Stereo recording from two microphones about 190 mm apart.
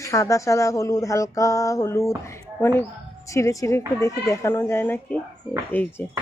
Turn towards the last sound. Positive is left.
turn(degrees=10)  # may be behind; listen again after turning